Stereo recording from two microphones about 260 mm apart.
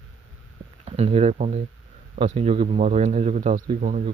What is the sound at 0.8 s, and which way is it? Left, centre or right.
Speech, right.